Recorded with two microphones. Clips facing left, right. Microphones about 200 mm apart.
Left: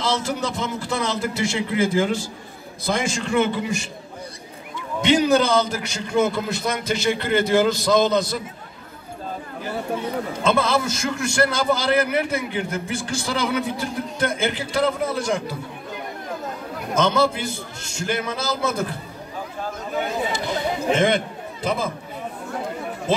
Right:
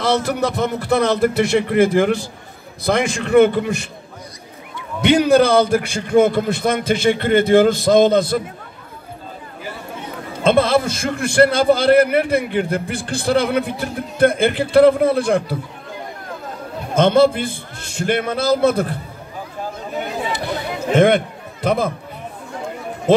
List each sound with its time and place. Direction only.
0.0 s a man's voice: 60° right (ahead or behind)
5.0 s a man's voice: 55° right (ahead or behind)
10.4 s a man's voice: 60° right (ahead or behind)
16.9 s a man's voice: 55° right (ahead or behind)
20.3 s a sound: 60° right (ahead or behind)